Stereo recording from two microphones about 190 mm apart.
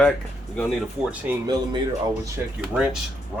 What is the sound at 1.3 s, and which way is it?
Speech, 5° right (ahead or behind).